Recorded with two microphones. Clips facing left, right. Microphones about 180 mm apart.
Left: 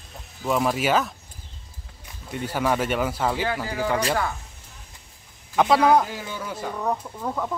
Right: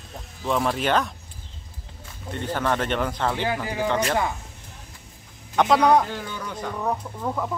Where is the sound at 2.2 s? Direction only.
10° left (ahead or behind).